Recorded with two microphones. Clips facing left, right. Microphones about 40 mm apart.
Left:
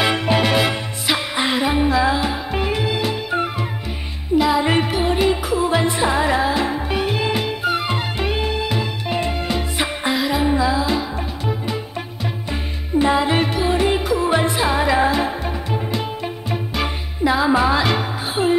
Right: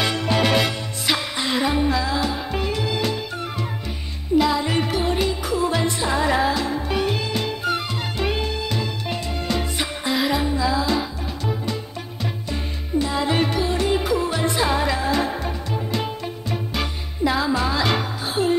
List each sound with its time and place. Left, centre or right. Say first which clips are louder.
0.0 s music: left 4 dB; left
0.4 s music: left 2 dB; centre
4.4 s music: left 3 dB; centre
10.1 s music: right 1 dB; centre
10.4 s music: left 4 dB; left
13.2 s music: left 2 dB; centre
14.0 s music: left 4 dB; centre